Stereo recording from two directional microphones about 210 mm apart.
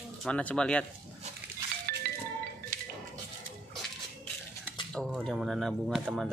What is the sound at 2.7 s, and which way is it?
Music, 40° right (ahead or behind).